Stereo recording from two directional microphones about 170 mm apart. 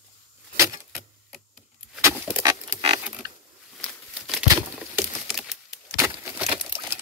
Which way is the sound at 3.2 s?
25° right (ahead or behind).